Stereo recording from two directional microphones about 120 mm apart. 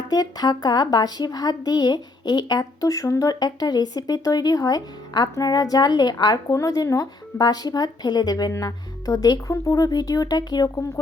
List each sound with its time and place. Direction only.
0.1 s speech: 35° left (ahead or behind)